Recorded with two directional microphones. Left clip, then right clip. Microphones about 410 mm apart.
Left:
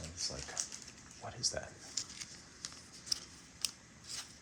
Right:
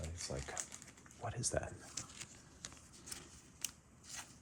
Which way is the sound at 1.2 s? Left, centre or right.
Right.